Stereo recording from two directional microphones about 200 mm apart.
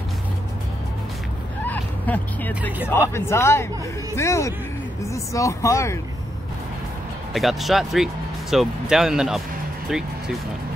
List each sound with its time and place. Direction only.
1.6 s vehicle: 10° left (ahead or behind)
3.2 s speech: 15° left (ahead or behind)
7.3 s speech: centre (ahead or behind)